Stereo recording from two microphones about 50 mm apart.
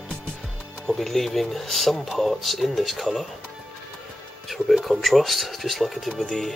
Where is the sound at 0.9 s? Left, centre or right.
Centre.